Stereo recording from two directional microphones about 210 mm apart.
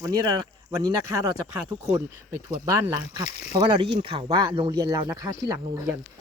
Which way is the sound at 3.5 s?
25° right (ahead or behind).